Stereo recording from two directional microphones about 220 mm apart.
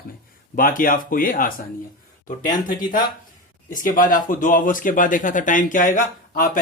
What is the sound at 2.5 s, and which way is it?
Speech, 20° left (ahead or behind).